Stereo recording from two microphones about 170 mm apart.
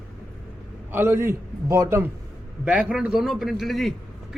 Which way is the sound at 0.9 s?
15° right (ahead or behind).